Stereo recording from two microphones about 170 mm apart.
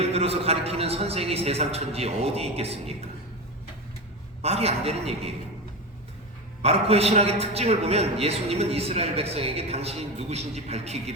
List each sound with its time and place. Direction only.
0.0 s a man's voice: 35° right (ahead or behind)
4.4 s a man's voice: 35° right (ahead or behind)
6.6 s a man's voice: 35° right (ahead or behind)